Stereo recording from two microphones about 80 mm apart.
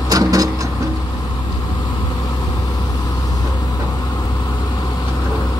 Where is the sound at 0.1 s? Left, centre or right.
Right.